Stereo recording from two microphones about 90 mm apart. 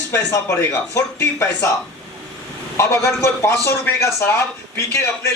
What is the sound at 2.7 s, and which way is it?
Speech, 30° left (ahead or behind).